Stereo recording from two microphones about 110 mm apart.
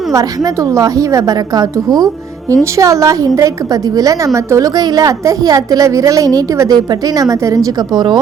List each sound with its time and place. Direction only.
0.7 s a woman's voice: 30° right (ahead or behind)